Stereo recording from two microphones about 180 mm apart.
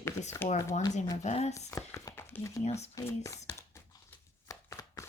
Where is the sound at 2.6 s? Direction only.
35° left (ahead or behind).